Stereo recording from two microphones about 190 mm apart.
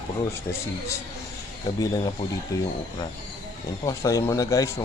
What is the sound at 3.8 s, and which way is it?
Speech, 15° left (ahead or behind).